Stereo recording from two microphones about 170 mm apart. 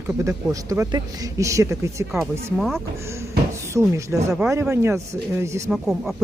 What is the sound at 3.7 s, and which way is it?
Speech, 15° right (ahead or behind).